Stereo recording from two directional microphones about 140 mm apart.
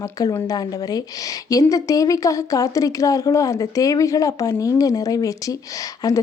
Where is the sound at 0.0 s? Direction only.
20° left (ahead or behind).